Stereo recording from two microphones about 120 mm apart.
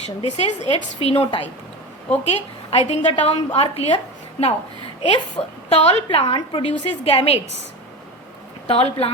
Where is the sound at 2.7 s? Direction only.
60° left (ahead or behind).